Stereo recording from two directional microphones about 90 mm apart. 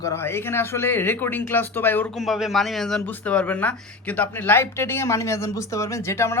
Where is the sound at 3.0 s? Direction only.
20° left (ahead or behind).